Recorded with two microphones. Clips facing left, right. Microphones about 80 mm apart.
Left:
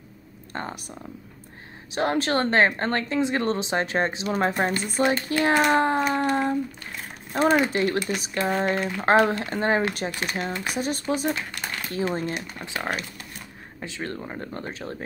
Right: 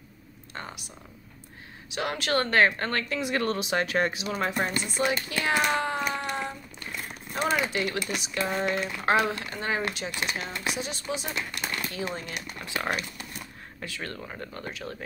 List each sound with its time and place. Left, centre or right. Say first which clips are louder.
0.5 s speech: left 6 dB; left
1.9 s speech: left 5 dB; left
12.6 s speech: even; left